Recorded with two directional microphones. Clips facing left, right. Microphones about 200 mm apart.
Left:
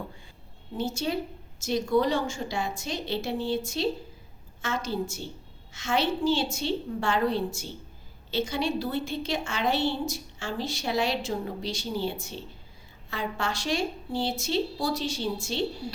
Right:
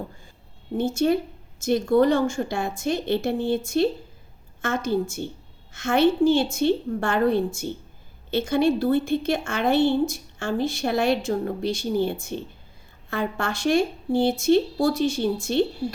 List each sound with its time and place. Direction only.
0.8 s a woman's voice: 55° right (ahead or behind)